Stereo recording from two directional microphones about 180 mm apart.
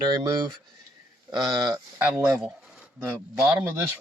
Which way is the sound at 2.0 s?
5° right (ahead or behind).